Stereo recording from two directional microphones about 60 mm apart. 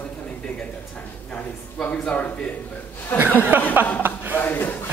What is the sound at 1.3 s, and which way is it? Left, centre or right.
Speech, left.